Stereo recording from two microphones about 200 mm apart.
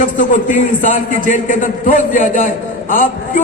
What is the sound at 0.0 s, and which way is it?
A man's voice, 40° left (ahead or behind).